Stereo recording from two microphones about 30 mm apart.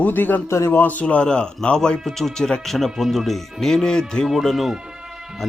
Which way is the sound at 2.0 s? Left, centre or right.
Centre.